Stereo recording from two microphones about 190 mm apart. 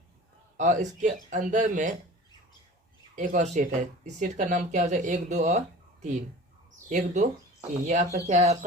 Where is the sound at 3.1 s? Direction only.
40° right (ahead or behind).